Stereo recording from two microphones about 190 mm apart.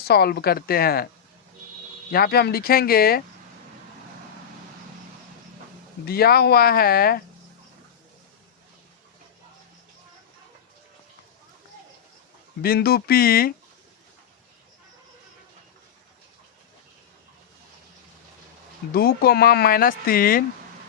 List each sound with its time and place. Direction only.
0.0 s speech: 55° left (ahead or behind)
2.1 s speech: 55° left (ahead or behind)
6.1 s speech: 55° left (ahead or behind)
12.6 s speech: 55° left (ahead or behind)
18.9 s speech: 55° left (ahead or behind)